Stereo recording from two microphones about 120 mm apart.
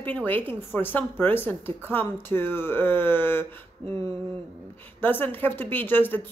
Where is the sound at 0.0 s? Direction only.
15° left (ahead or behind).